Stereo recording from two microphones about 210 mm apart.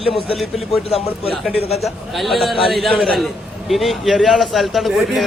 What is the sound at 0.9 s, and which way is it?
Speech, 30° left (ahead or behind).